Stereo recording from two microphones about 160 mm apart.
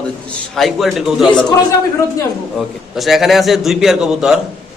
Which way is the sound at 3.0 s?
Centre (ahead or behind).